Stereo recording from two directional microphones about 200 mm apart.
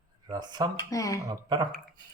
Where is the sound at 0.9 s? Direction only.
15° left (ahead or behind).